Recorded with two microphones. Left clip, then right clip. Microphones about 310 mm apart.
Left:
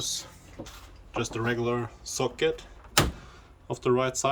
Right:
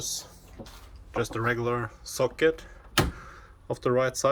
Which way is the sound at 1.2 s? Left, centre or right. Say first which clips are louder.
Right 2 dB; centre.